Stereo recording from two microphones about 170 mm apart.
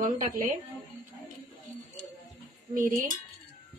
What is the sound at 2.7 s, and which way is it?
Speech, 50° right (ahead or behind).